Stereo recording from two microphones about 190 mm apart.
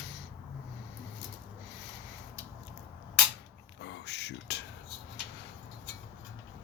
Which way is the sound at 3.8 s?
65° left (ahead or behind).